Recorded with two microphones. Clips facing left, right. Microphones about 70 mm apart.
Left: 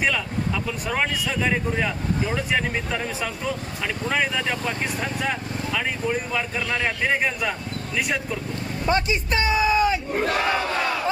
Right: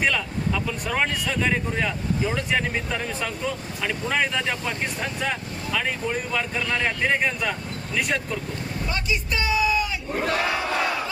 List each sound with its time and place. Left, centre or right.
0.0 s a man's voice: centre
5.7 s a man's voice: centre
6.6 s speech: centre
6.8 s a man's voice: centre
8.9 s speech: left